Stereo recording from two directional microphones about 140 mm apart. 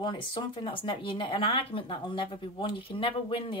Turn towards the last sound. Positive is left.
turn(degrees=40)  # may be behind; listen again after turning